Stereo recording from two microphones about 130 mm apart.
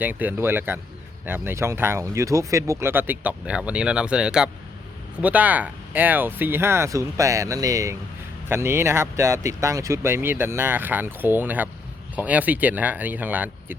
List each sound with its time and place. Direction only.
0.0 s speech: 15° right (ahead or behind)